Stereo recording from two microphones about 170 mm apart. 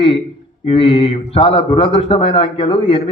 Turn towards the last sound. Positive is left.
turn(degrees=35)  # may be behind; listen again after turning